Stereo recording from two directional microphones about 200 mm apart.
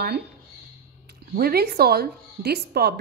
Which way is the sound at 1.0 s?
50° right (ahead or behind).